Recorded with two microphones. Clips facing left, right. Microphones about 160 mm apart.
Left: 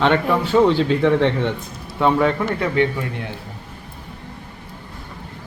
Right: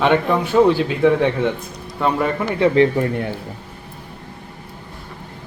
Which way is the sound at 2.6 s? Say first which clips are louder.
Right 8 dB; 30° right (ahead or behind).